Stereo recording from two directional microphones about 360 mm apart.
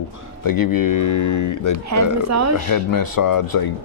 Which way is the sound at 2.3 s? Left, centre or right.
Right.